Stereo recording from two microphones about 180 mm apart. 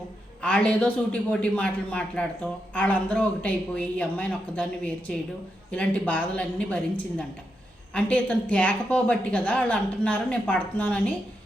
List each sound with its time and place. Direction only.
0.4 s a man's voice: 5° left (ahead or behind)